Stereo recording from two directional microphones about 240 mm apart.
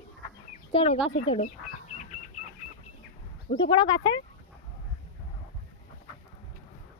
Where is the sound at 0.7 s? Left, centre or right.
Left.